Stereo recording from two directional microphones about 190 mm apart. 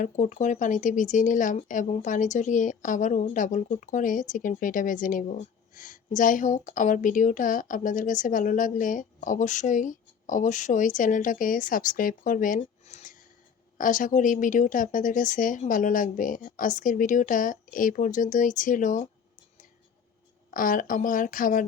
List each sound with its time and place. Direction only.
0.0 s speech: 40° left (ahead or behind)
20.5 s speech: 45° left (ahead or behind)